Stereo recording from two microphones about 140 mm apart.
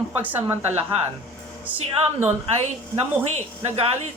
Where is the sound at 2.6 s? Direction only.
50° right (ahead or behind).